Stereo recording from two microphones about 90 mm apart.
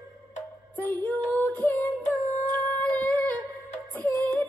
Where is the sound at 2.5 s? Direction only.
20° left (ahead or behind).